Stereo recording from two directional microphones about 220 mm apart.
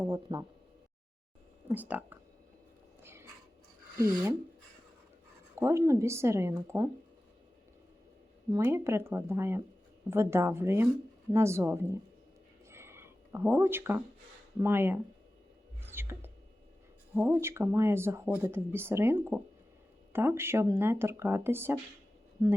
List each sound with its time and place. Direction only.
0.0 s speech: 15° right (ahead or behind)
1.6 s speech: 10° right (ahead or behind)
3.0 s a sound: 10° right (ahead or behind)
5.5 s speech: 15° right (ahead or behind)
8.4 s speech: 15° right (ahead or behind)
12.7 s a sound: 10° right (ahead or behind)
14.6 s speech: 10° right (ahead or behind)
15.8 s whispering: 10° right (ahead or behind)
17.2 s speech: 10° right (ahead or behind)